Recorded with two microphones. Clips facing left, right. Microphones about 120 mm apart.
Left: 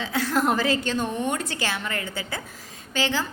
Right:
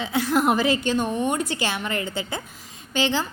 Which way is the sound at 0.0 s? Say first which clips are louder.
Right 2 dB; 15° right (ahead or behind).